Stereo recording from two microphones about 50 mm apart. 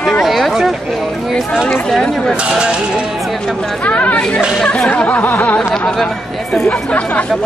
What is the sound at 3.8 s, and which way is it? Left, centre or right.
Speech, left.